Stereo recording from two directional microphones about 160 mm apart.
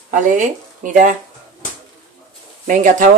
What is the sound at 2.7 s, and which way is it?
Speech, 50° right (ahead or behind).